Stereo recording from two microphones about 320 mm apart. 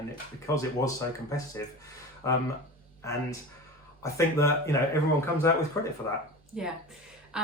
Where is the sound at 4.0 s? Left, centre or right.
Centre.